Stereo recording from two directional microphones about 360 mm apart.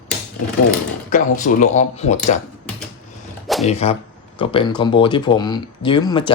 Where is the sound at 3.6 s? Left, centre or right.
Centre.